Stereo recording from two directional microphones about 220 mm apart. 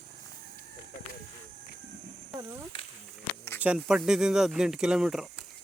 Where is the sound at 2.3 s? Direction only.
15° right (ahead or behind).